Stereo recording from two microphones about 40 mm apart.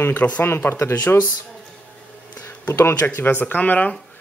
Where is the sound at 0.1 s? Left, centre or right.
Left.